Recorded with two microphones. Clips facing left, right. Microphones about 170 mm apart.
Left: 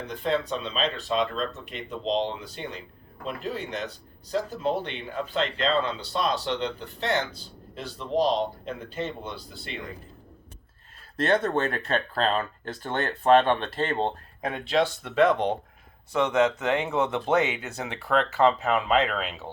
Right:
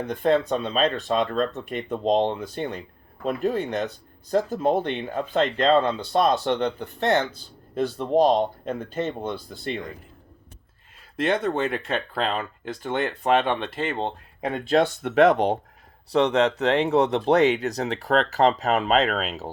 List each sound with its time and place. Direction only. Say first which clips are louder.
0.0 s speech: right 6 dB; 55° right (ahead or behind)
11.2 s speech: right 1 dB; 15° right (ahead or behind)
14.7 s speech: right 4 dB; 55° right (ahead or behind)
16.1 s speech: right 3 dB; 35° right (ahead or behind)